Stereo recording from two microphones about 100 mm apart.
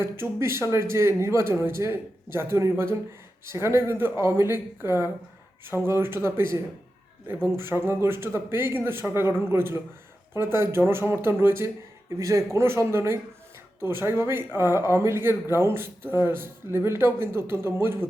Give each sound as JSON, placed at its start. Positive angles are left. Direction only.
{"t": 0.0, "sound": "speech", "side_deg": -25}